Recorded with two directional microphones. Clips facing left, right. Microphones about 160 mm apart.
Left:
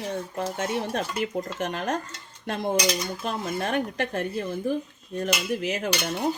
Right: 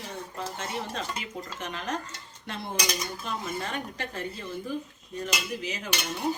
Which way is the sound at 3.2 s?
55° left (ahead or behind).